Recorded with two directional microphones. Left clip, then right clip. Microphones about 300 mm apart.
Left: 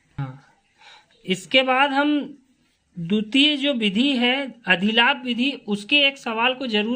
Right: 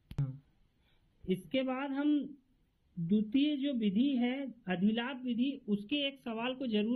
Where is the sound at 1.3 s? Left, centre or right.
Left.